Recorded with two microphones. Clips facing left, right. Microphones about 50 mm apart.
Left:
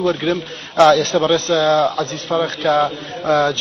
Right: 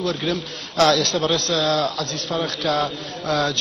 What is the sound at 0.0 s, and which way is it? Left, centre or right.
A man's voice, left.